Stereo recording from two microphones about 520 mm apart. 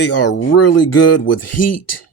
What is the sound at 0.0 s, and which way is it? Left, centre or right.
Speech, left.